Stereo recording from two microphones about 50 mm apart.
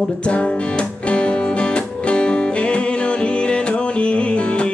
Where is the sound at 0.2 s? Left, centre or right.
Left.